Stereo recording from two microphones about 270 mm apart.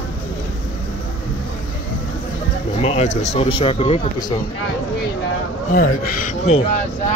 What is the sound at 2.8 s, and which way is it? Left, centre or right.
Speech, left.